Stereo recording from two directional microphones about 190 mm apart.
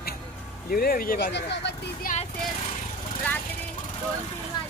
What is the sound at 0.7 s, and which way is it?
Speech, 50° left (ahead or behind).